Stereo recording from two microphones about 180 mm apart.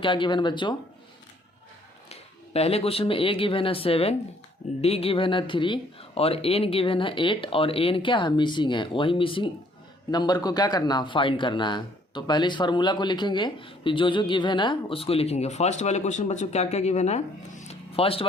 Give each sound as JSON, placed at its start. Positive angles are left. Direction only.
{"t": 0.0, "sound": "speech", "side_deg": 25}
{"t": 2.0, "sound": "speech", "side_deg": 35}